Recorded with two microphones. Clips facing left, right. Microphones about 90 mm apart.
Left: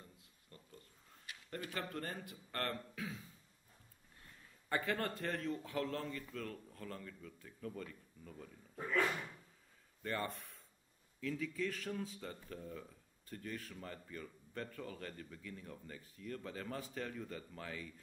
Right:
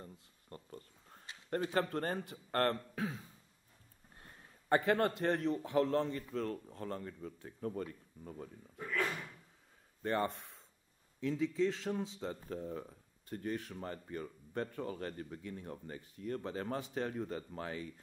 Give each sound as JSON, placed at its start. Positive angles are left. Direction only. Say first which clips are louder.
{"t": 0.0, "sound": "a sound", "louder": "right 8 dB", "side_deg": -40}
{"t": 1.3, "sound": "a sound", "louder": "even", "side_deg": -30}
{"t": 1.8, "sound": "speech", "louder": "right 8 dB", "side_deg": -45}
{"t": 4.2, "sound": "a sound", "louder": "right 4 dB", "side_deg": -45}
{"t": 5.2, "sound": "a man's voice", "louder": "right 7 dB", "side_deg": -25}
{"t": 8.8, "sound": "speech", "louder": "left 1 dB", "side_deg": 20}
{"t": 10.0, "sound": "a man's voice", "louder": "right 6 dB", "side_deg": -30}
{"t": 12.4, "sound": "speech", "louder": "right 7 dB", "side_deg": -35}
{"t": 13.3, "sound": "speech", "louder": "right 7 dB", "side_deg": -45}
{"t": 14.0, "sound": "speech", "louder": "right 6 dB", "side_deg": -35}